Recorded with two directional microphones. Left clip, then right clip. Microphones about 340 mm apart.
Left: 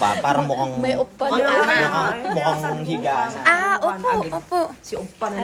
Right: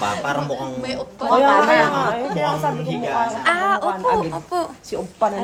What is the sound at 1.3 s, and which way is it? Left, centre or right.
Speech, centre.